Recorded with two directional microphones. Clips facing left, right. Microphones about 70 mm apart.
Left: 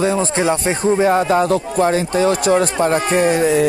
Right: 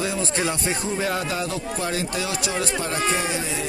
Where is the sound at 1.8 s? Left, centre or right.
Left.